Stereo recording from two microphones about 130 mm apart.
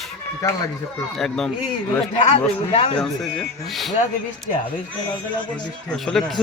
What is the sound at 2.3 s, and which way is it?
Speech, 50° left (ahead or behind).